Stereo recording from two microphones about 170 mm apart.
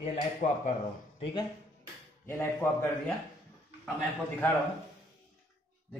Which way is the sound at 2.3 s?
15° left (ahead or behind).